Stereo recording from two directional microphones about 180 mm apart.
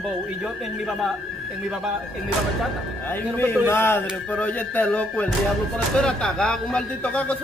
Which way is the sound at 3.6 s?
10° left (ahead or behind).